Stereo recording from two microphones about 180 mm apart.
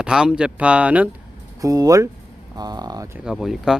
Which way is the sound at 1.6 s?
20° right (ahead or behind).